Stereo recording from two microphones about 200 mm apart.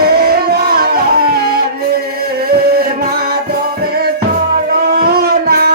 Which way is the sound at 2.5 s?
50° right (ahead or behind).